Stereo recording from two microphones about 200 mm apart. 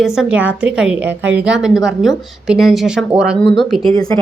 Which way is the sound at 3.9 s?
20° left (ahead or behind).